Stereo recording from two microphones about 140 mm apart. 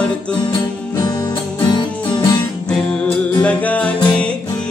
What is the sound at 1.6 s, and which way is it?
Music, 30° left (ahead or behind).